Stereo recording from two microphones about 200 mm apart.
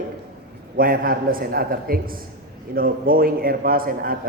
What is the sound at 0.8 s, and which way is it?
A man's voice, 45° right (ahead or behind).